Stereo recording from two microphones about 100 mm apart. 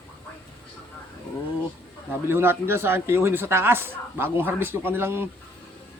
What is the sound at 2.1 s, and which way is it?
Speech, 25° right (ahead or behind).